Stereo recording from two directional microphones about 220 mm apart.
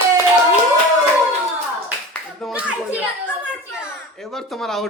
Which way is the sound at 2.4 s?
5° right (ahead or behind).